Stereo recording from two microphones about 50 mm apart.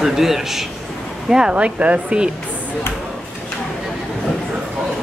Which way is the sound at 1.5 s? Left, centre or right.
Right.